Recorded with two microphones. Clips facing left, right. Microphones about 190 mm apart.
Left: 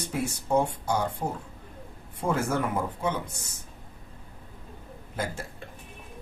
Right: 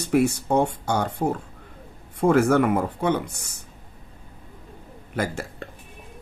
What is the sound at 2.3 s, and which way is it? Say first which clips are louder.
Speech: right 9 dB; 75° right (ahead or behind).